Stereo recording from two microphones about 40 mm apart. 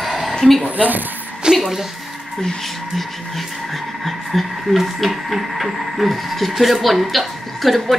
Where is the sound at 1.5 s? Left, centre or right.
Centre.